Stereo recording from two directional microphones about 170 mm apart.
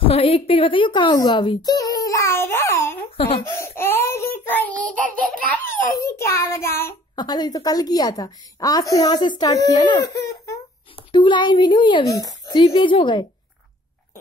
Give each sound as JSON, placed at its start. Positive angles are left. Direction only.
{"t": 0.0, "sound": "speech", "side_deg": 30}
{"t": 3.2, "sound": "speech", "side_deg": 35}
{"t": 3.4, "sound": "child singing", "side_deg": 15}
{"t": 5.5, "sound": "a child's voice", "side_deg": 15}